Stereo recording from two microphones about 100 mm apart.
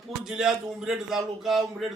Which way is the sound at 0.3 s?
5° right (ahead or behind).